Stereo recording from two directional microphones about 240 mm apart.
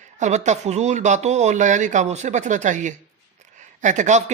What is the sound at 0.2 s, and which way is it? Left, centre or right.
Speech, right.